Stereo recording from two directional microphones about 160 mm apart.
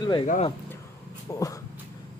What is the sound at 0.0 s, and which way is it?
Speech, 30° left (ahead or behind).